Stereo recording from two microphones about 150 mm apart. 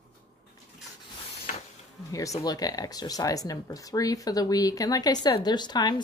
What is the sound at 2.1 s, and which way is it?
Speech, 20° left (ahead or behind).